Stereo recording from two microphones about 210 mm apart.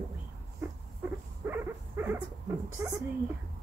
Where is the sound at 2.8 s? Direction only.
15° right (ahead or behind).